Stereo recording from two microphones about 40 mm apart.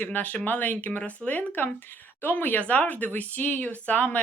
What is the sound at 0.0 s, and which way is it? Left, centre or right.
Speech, left.